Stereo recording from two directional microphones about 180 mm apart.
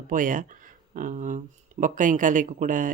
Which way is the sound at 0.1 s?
50° right (ahead or behind).